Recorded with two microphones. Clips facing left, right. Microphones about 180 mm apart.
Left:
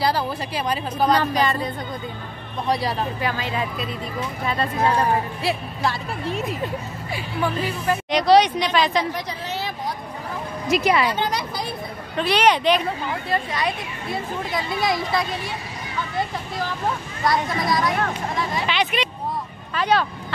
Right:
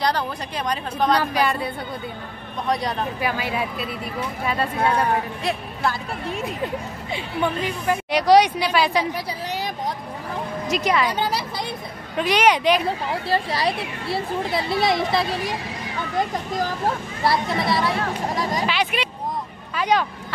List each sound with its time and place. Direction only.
0.0 s a woman's voice: 5° left (ahead or behind)
1.2 s speech: 10° right (ahead or behind)
3.2 s speech: 10° right (ahead or behind)
4.9 s a woman's voice: centre (ahead or behind)
7.8 s speech: 10° right (ahead or behind)
10.7 s a woman's voice: 5° left (ahead or behind)
12.2 s speech: 10° right (ahead or behind)
12.8 s speech: 35° right (ahead or behind)
16.2 s speech: 45° right (ahead or behind)
17.2 s speech: 30° right (ahead or behind)
18.7 s a sound: 5° right (ahead or behind)
19.7 s speech: 10° right (ahead or behind)